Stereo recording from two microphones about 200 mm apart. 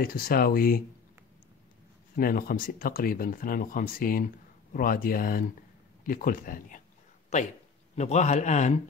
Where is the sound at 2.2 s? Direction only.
45° left (ahead or behind).